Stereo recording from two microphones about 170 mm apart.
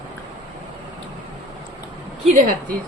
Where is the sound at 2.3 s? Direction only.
50° right (ahead or behind).